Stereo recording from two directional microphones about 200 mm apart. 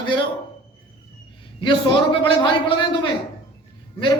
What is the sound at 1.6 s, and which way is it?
A man's voice, 25° left (ahead or behind).